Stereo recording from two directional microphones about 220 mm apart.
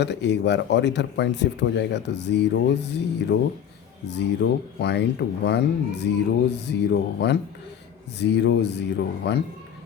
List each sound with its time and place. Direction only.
0.0 s speech: 50° left (ahead or behind)